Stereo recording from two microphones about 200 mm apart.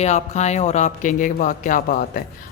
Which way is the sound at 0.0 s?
35° left (ahead or behind).